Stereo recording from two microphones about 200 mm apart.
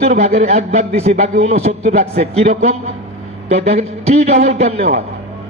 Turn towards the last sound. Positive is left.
turn(degrees=-30)  # may be behind; listen again after turning